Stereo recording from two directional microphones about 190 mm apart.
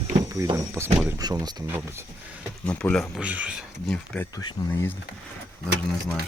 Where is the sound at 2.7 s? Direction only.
5° left (ahead or behind).